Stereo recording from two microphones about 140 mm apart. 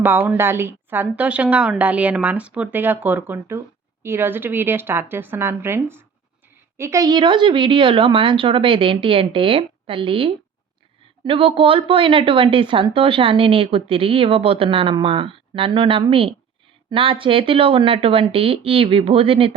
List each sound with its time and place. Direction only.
0.0 s speech: 15° right (ahead or behind); by 19.5 s 40° right (ahead or behind)